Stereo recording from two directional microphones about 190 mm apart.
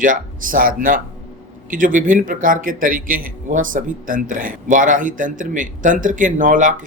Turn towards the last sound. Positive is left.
turn(degrees=-45)  # may be behind; listen again after turning